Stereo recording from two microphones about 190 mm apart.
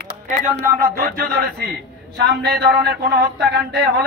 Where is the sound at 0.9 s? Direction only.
55° right (ahead or behind).